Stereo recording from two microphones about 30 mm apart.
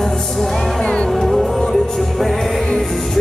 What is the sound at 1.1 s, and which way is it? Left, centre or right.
Music, centre.